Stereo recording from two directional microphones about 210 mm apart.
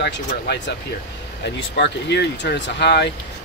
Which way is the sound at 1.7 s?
55° left (ahead or behind).